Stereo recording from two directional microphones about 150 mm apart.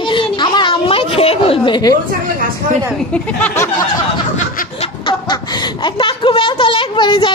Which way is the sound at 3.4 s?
15° left (ahead or behind).